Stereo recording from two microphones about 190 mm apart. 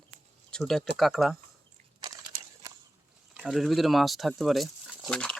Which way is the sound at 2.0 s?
20° right (ahead or behind).